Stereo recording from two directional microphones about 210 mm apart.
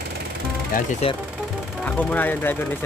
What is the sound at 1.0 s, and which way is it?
Speech, 25° left (ahead or behind).